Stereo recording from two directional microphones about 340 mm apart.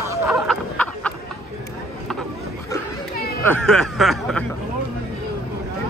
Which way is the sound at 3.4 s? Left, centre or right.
Centre.